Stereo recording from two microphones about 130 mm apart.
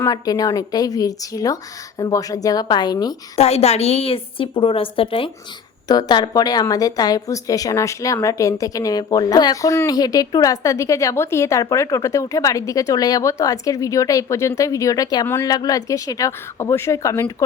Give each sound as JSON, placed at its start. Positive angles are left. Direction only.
{"t": 0.0, "sound": "a woman's voice", "side_deg": 30}
{"t": 3.3, "sound": "a woman's voice", "side_deg": 55}
{"t": 5.9, "sound": "a woman's voice", "side_deg": 30}